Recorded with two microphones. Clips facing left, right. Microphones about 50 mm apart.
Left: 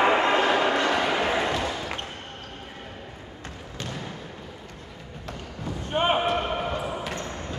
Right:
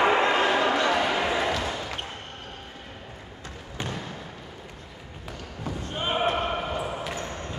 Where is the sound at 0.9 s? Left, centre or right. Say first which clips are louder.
Even; centre.